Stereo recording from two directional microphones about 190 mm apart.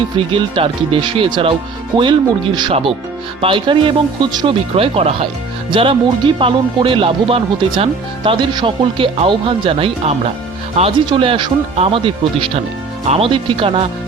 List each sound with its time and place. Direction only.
0.3 s speech: 25° right (ahead or behind)